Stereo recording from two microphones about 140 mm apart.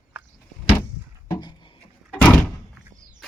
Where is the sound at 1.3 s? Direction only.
30° left (ahead or behind).